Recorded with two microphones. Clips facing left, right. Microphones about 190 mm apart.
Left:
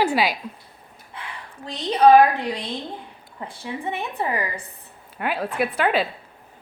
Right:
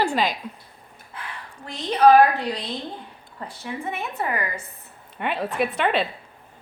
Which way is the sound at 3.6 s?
15° left (ahead or behind).